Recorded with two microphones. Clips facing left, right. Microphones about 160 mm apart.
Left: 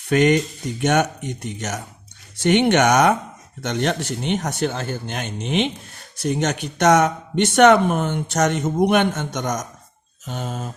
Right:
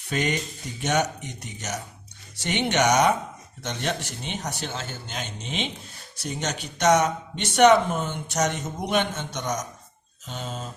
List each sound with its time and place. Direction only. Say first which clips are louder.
0.1 s speech: left 10 dB; 60° left (ahead or behind)